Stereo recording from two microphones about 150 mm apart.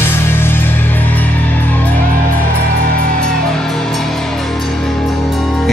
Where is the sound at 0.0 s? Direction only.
15° left (ahead or behind).